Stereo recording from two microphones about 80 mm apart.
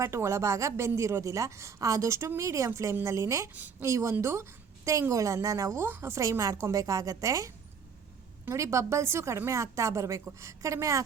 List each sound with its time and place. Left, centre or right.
0.0 s a woman's voice: right
3.5 s a woman's voice: right
3.8 s a woman's voice: right
5.8 s a woman's voice: right